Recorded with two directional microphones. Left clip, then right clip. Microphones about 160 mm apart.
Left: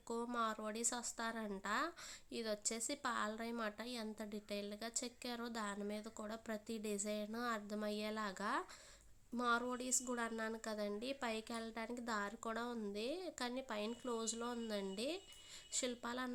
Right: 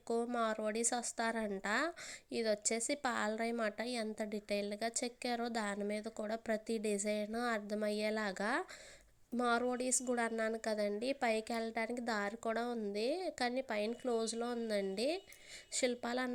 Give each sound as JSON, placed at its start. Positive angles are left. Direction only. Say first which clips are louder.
{"t": 0.1, "sound": "a woman's voice", "louder": "right 5 dB", "side_deg": -25}